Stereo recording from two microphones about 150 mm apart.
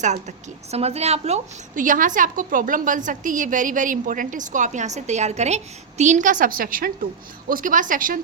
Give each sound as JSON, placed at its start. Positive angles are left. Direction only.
{"t": 0.0, "sound": "a woman's voice", "side_deg": -50}